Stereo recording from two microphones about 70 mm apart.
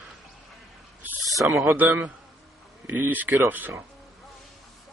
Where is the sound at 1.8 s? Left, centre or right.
Right.